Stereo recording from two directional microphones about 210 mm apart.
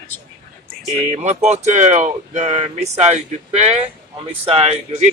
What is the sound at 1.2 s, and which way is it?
Speech, 35° right (ahead or behind).